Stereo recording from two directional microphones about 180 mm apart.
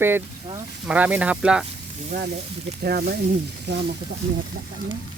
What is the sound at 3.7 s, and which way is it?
Speech, 70° right (ahead or behind).